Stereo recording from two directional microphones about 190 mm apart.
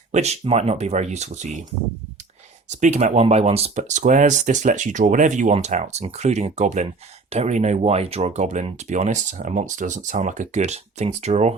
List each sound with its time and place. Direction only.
0.1 s speech: 35° right (ahead or behind)
2.6 s speech: 35° right (ahead or behind)